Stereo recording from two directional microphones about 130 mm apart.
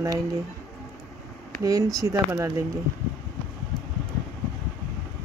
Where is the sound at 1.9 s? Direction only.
20° right (ahead or behind).